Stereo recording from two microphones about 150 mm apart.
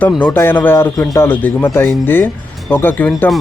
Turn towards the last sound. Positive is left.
turn(degrees=10)  # may be behind; listen again after turning